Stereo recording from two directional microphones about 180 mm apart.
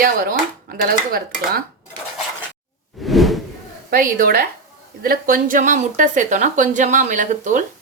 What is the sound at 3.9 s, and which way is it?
Dishes, 55° right (ahead or behind).